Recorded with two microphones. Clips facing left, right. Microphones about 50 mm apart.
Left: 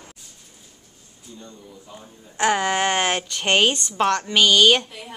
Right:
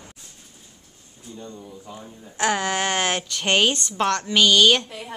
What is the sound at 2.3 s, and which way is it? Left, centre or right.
A woman's voice, left.